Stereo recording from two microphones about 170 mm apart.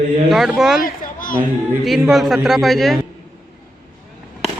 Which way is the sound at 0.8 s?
55° left (ahead or behind).